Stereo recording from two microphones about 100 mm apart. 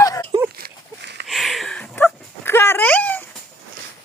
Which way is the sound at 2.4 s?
25° left (ahead or behind).